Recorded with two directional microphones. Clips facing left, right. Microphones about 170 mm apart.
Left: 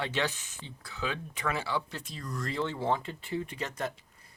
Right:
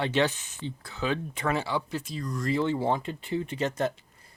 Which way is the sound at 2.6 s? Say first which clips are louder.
Right 1 dB; 10° right (ahead or behind).